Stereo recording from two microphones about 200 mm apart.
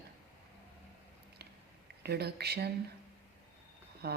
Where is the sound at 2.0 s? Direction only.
55° right (ahead or behind).